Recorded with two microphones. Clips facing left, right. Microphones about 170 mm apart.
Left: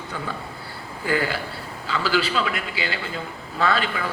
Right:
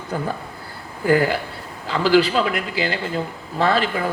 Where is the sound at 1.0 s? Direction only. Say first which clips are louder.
Right 7 dB; 50° right (ahead or behind).